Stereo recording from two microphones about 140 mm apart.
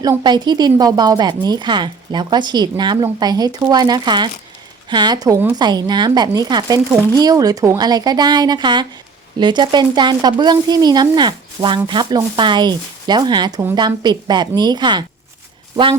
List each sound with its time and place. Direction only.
0.2 s speech: 30° right (ahead or behind)